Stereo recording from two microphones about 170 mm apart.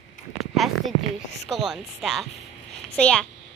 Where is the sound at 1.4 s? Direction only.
Centre (ahead or behind).